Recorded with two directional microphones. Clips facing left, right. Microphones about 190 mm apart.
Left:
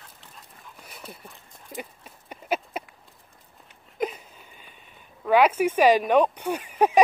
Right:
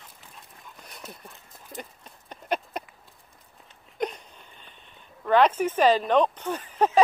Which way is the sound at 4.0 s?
5° left (ahead or behind).